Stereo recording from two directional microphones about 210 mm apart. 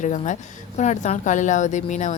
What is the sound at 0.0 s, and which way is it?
A woman's voice, 35° left (ahead or behind).